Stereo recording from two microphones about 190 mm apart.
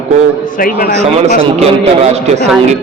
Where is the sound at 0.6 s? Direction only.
50° left (ahead or behind).